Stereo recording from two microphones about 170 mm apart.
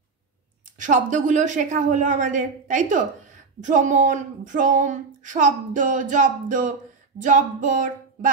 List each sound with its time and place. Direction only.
0.7 s speech: 50° right (ahead or behind)